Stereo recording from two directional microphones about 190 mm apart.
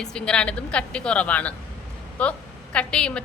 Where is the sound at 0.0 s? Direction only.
5° left (ahead or behind).